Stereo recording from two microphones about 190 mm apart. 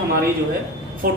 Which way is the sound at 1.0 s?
50° right (ahead or behind).